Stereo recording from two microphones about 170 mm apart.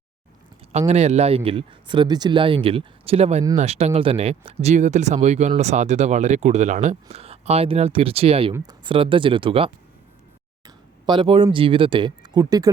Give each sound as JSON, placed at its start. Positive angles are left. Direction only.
{"t": 0.7, "sound": "speech", "side_deg": -40}
{"t": 11.0, "sound": "speech", "side_deg": -30}